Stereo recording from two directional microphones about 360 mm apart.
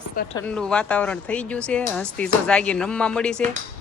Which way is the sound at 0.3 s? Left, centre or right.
Centre.